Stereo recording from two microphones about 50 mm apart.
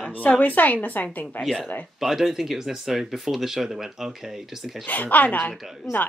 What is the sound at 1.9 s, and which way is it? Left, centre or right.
Speech, centre.